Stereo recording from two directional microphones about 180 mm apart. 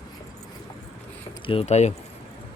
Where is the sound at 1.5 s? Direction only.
35° left (ahead or behind).